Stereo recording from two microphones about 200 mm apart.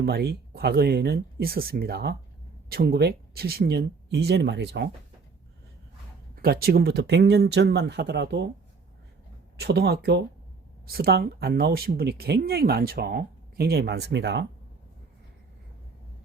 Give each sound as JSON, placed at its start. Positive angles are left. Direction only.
{"t": 0.0, "sound": "speech", "side_deg": -50}
{"t": 6.3, "sound": "speech", "side_deg": -50}
{"t": 9.6, "sound": "speech", "side_deg": -55}